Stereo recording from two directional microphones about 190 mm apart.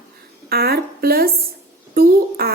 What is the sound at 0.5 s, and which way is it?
A woman's voice, 55° right (ahead or behind).